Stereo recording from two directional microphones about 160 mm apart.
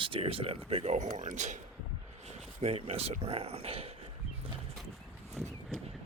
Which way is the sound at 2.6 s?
40° right (ahead or behind).